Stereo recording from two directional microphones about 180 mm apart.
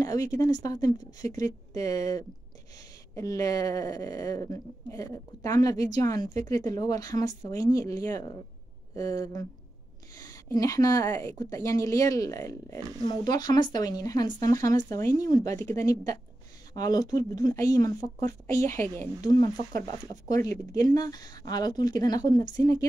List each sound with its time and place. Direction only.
0.0 s a woman's voice: 20° left (ahead or behind)
19.4 s speech: 50° right (ahead or behind)
20.4 s speech: 20° left (ahead or behind)